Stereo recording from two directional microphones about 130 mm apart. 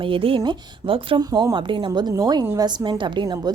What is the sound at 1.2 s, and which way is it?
A woman's voice, 30° right (ahead or behind).